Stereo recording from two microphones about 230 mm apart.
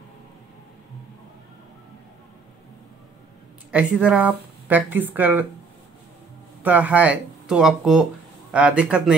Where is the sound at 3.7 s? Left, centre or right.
Centre.